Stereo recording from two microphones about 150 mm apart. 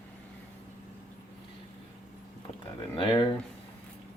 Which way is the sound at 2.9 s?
35° left (ahead or behind).